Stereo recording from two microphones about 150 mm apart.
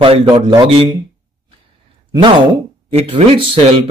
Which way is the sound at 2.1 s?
30° right (ahead or behind).